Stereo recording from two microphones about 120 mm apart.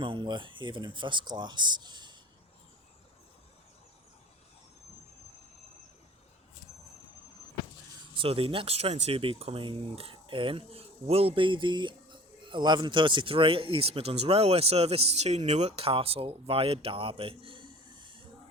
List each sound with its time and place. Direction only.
0.0 s speech: 45° right (ahead or behind)
8.1 s speech: 50° right (ahead or behind)